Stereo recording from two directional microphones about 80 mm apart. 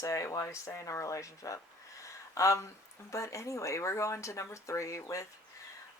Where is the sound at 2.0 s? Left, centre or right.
Left.